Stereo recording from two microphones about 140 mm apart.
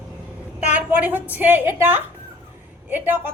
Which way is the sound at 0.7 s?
10° right (ahead or behind).